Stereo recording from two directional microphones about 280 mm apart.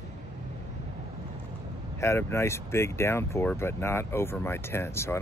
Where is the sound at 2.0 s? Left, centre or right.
Centre.